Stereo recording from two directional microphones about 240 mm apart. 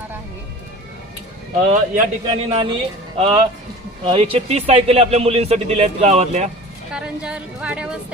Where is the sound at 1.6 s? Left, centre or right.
Right.